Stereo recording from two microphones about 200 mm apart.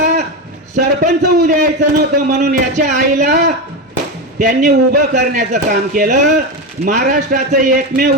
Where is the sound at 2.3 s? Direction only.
35° right (ahead or behind).